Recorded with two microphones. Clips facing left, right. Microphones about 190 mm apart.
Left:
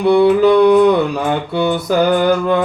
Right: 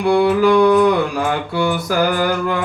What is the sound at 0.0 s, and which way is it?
Mantra, 25° left (ahead or behind).